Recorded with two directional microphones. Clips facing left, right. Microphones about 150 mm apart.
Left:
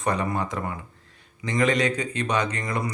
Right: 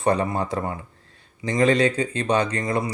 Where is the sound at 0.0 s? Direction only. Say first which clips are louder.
Right 4 dB; 30° right (ahead or behind).